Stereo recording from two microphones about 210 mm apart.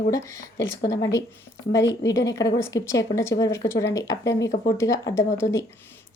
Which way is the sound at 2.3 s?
60° left (ahead or behind).